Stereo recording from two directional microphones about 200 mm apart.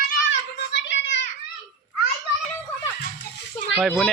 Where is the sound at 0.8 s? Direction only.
60° left (ahead or behind).